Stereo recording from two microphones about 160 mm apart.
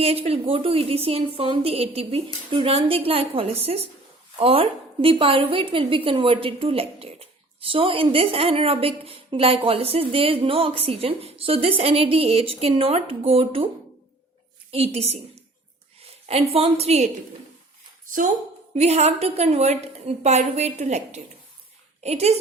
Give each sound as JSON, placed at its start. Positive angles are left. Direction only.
{"t": 0.0, "sound": "a woman's voice", "side_deg": -35}
{"t": 14.7, "sound": "a woman's voice", "side_deg": -40}
{"t": 18.7, "sound": "a woman's voice", "side_deg": -40}